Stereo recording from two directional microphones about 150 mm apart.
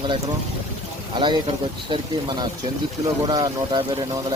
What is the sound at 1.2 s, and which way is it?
Speech, 35° right (ahead or behind).